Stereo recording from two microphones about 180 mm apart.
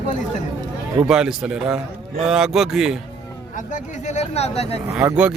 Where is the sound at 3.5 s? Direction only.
45° left (ahead or behind).